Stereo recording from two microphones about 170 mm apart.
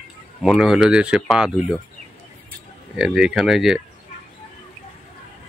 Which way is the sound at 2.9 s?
5° right (ahead or behind).